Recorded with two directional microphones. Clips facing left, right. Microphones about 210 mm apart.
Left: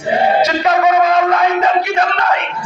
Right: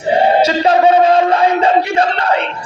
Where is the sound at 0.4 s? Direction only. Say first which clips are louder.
Right 3 dB; 30° right (ahead or behind).